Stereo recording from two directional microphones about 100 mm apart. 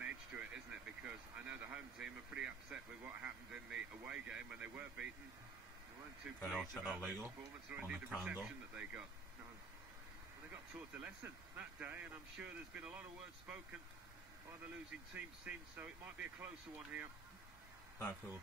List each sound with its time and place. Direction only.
0.0 s a sound: 10° right (ahead or behind)
3.1 s speech: 15° right (ahead or behind)
6.5 s speech: centre (ahead or behind)
6.9 s speech: 20° right (ahead or behind)
10.5 s speech: 15° right (ahead or behind)
14.9 s speech: 15° right (ahead or behind)